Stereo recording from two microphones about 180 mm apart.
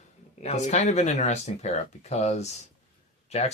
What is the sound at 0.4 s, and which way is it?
Speech, 40° left (ahead or behind).